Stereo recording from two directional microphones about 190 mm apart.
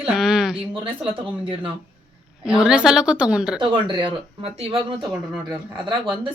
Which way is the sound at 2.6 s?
5° right (ahead or behind).